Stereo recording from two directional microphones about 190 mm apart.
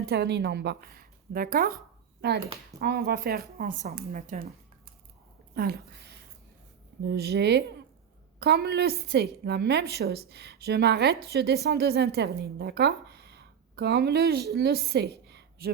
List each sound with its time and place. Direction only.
0.0 s a woman's voice: 55° right (ahead or behind)
5.5 s a woman's voice: 55° right (ahead or behind)